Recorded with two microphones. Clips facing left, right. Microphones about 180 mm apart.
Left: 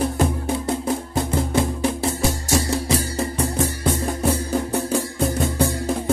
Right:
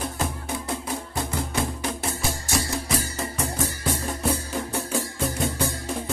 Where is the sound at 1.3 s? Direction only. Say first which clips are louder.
Left 7 dB; 30° left (ahead or behind).